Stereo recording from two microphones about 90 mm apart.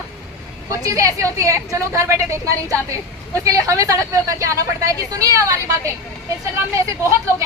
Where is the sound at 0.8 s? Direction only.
40° right (ahead or behind).